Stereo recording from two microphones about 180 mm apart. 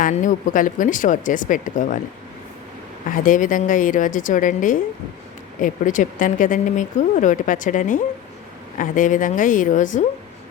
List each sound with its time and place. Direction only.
0.0 s speech: 45° left (ahead or behind)
3.1 s speech: 45° left (ahead or behind)